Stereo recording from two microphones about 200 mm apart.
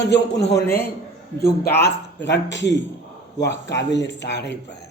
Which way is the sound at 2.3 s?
60° left (ahead or behind).